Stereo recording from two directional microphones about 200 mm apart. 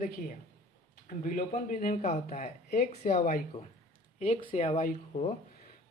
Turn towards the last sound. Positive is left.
turn(degrees=35)  # may be behind; listen again after turning